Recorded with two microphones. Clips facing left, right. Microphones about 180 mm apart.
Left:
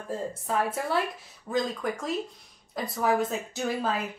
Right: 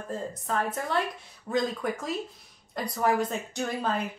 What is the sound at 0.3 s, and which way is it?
A woman's voice, 5° left (ahead or behind).